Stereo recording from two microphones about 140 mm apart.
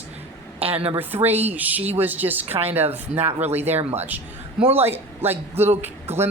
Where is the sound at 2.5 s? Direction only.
45° right (ahead or behind).